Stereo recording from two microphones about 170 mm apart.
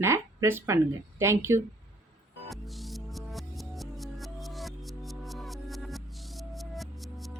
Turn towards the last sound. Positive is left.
turn(degrees=0)  # may be behind; listen again after turning